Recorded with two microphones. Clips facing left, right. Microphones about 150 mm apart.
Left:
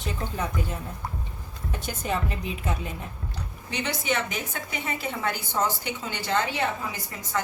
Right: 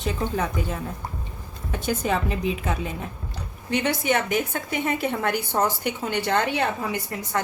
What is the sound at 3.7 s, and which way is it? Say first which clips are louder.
A woman's voice: right 6 dB; 55° right (ahead or behind).